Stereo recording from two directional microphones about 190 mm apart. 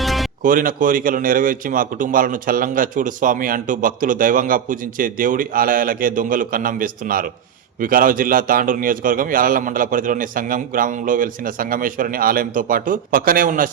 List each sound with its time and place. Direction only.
0.0 s music: centre (ahead or behind)
0.4 s speech: 45° right (ahead or behind)